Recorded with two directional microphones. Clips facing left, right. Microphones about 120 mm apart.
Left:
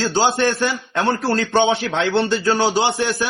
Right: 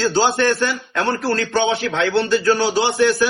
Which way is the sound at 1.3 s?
25° left (ahead or behind).